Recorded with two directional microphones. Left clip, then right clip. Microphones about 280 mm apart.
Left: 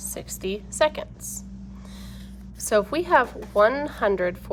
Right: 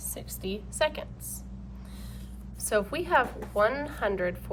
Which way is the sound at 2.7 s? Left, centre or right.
Centre.